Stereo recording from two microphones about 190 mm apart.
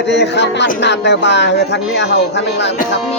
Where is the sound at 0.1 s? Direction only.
65° left (ahead or behind).